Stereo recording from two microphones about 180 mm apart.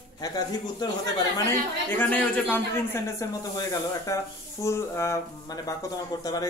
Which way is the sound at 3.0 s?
20° left (ahead or behind).